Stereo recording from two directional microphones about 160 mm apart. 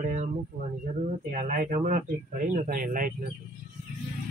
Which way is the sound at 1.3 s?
50° right (ahead or behind).